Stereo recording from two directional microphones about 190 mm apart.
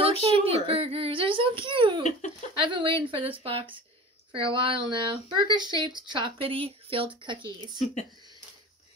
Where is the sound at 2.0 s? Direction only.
40° left (ahead or behind).